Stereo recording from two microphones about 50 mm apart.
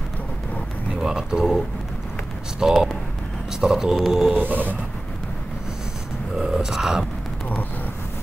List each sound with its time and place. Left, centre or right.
0.9 s speech: centre
2.6 s speech: centre
4.4 s a sound: right
6.4 s speech: centre